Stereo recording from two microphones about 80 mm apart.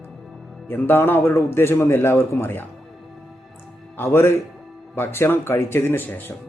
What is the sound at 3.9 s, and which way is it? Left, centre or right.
A man's voice, left.